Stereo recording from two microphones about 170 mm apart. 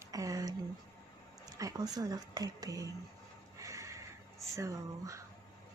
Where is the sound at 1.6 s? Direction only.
20° right (ahead or behind).